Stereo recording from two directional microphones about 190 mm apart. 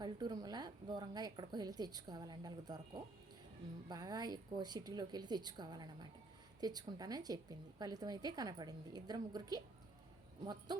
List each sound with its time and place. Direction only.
0.0 s a woman's voice: 20° right (ahead or behind)